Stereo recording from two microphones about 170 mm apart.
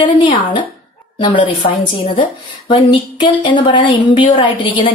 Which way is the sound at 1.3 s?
30° left (ahead or behind).